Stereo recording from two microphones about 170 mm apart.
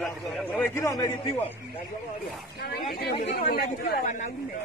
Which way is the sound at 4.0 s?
45° left (ahead or behind).